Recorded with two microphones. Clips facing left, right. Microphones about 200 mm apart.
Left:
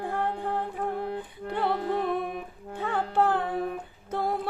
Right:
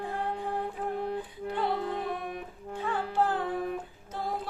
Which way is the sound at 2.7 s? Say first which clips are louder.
Left 3 dB; 60° left (ahead or behind).